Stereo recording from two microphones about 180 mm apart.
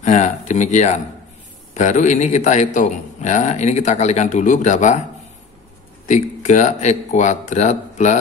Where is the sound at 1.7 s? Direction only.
40° left (ahead or behind).